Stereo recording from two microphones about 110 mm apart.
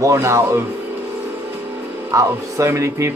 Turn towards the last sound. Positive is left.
turn(degrees=-25)  # may be behind; listen again after turning